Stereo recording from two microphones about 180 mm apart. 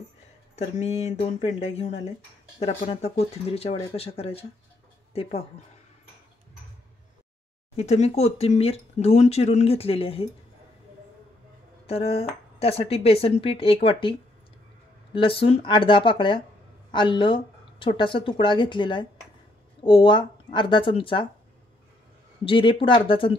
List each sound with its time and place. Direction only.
0.6 s speech: 35° left (ahead or behind)
7.7 s speech: 40° left (ahead or behind)
11.8 s speech: 35° left (ahead or behind)
15.1 s speech: 30° left (ahead or behind)
22.4 s speech: 30° left (ahead or behind)